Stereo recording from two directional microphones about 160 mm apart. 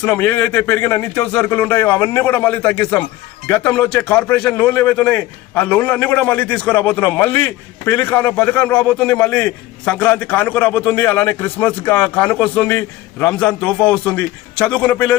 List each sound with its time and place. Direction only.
0.0 s a man's voice: 10° left (ahead or behind)